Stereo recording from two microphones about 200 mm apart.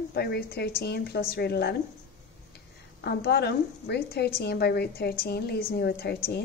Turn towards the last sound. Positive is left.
turn(degrees=50)  # may be behind; listen again after turning